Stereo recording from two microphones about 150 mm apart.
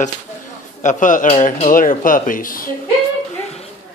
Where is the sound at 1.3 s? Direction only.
45° left (ahead or behind); by 2.7 s 65° left (ahead or behind).